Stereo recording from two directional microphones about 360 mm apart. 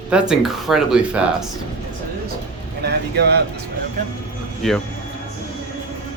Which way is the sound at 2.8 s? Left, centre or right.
Right.